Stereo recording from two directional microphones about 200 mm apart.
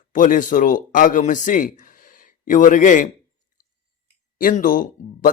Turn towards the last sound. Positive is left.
turn(degrees=45)  # may be behind; listen again after turning